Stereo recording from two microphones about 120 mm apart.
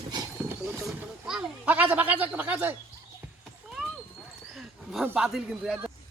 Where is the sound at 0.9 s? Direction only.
10° right (ahead or behind).